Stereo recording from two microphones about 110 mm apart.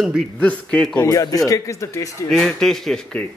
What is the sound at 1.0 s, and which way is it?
Speech, 35° left (ahead or behind).